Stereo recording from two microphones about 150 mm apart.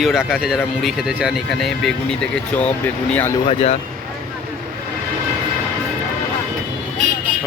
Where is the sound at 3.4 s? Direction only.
45° left (ahead or behind).